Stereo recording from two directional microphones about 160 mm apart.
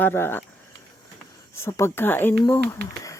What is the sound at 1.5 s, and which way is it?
Speech, 15° left (ahead or behind).